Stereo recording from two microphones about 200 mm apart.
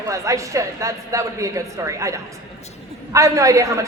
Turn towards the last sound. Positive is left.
turn(degrees=-15)  # may be behind; listen again after turning